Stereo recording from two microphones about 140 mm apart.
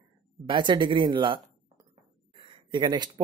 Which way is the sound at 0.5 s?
35° right (ahead or behind).